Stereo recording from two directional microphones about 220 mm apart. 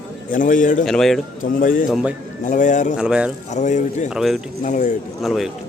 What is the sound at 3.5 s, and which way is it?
Speech, 35° left (ahead or behind).